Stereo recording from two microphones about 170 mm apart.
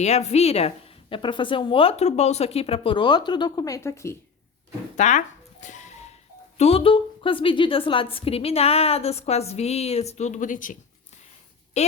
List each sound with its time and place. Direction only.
0.0 s a woman's voice: 40° left (ahead or behind); by 4.2 s 15° left (ahead or behind)
4.9 s a sound: 45° left (ahead or behind)
6.6 s a woman's voice: 35° left (ahead or behind); by 10.8 s 50° left (ahead or behind)
11.8 s a woman's voice: 40° left (ahead or behind)